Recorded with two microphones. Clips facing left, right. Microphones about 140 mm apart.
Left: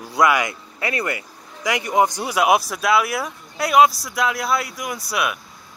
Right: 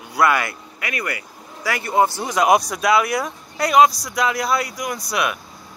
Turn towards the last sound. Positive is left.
turn(degrees=5)  # may be behind; listen again after turning